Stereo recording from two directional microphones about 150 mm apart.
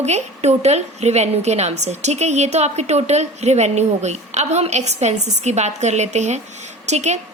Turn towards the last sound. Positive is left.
turn(degrees=-50)  # may be behind; listen again after turning